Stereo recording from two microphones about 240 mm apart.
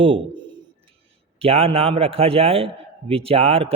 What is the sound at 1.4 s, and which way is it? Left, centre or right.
Speech, right.